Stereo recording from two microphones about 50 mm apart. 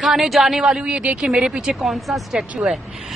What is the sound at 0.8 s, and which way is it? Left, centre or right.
Speech, right.